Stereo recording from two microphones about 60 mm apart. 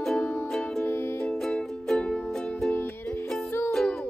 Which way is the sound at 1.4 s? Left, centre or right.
Centre.